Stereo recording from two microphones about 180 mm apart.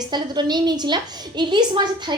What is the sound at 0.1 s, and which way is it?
A woman's voice, 25° right (ahead or behind).